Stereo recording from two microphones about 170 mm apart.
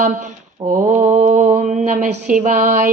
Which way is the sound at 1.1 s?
40° right (ahead or behind).